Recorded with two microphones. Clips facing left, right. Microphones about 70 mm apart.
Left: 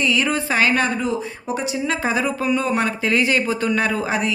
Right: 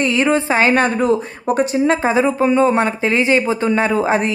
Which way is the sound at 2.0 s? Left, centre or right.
Right.